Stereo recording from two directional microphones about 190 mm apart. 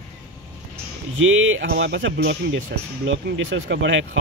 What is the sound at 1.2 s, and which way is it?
Speech, 90° right.